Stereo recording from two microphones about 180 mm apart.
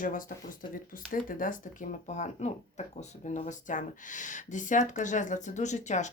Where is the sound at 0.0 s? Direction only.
50° left (ahead or behind).